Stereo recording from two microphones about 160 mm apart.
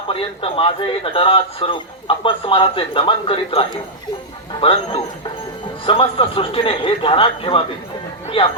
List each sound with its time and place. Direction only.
0.1 s speech: 35° left (ahead or behind)